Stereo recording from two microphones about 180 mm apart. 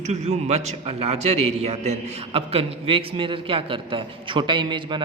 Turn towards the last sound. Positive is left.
turn(degrees=-25)  # may be behind; listen again after turning